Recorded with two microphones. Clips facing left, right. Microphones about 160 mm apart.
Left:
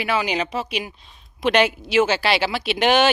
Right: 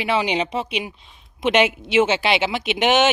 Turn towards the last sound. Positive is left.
turn(degrees=-20)  # may be behind; listen again after turning